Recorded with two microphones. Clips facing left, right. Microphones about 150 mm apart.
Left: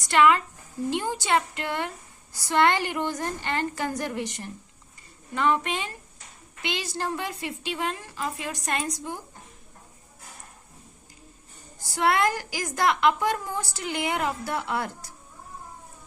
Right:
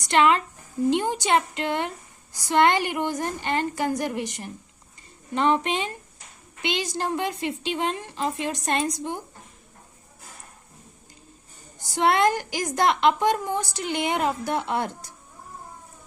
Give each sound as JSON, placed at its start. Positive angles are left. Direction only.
{"t": 0.1, "sound": "a woman's voice", "side_deg": -25}
{"t": 11.8, "sound": "a woman's voice", "side_deg": -25}